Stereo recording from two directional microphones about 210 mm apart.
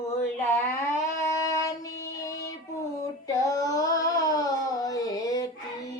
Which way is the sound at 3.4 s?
15° left (ahead or behind).